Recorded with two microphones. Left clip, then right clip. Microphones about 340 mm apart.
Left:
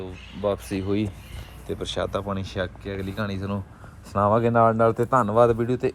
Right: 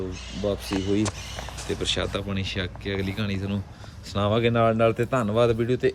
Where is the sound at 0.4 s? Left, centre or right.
Centre.